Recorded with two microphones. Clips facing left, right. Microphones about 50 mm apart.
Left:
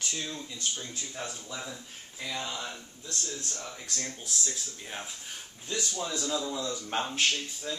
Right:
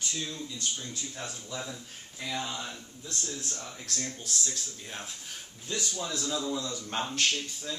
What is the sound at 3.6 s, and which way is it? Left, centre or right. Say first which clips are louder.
Speech: even; centre.